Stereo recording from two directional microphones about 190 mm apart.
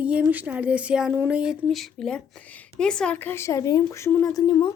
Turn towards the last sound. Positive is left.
turn(degrees=20)  # may be behind; listen again after turning